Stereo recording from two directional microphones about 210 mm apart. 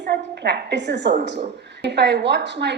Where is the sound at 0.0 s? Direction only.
55° right (ahead or behind).